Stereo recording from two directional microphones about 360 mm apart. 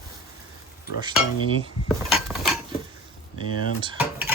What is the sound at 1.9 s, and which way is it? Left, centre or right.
Cutlery, centre.